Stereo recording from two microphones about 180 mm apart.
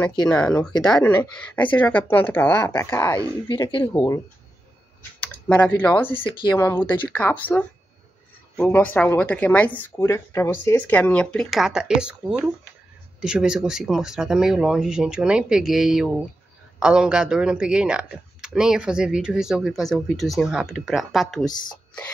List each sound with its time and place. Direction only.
0.3 s speech: 10° left (ahead or behind)
5.2 s speech: 10° left (ahead or behind)
6.1 s speech: 25° left (ahead or behind)
6.5 s speech: 10° left (ahead or behind)